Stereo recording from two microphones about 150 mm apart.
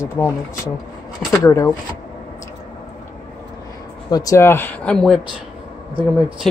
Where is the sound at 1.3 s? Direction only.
20° left (ahead or behind).